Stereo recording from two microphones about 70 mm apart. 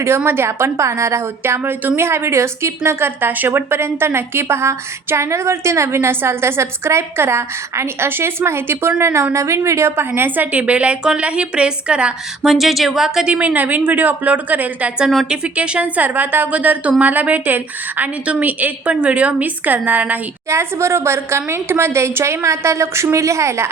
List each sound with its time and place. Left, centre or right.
0.3 s a woman's voice: right; by 12.5 s centre
12.5 s speech: centre
13.3 s a woman's voice: right
20.5 s a woman's voice: right